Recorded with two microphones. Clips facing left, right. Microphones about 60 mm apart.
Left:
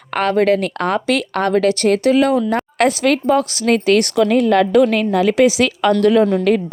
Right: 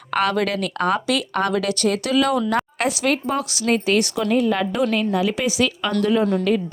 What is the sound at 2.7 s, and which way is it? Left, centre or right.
Speech, left.